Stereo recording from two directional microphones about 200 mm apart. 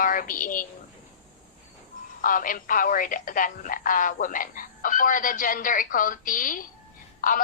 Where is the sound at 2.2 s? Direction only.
45° left (ahead or behind).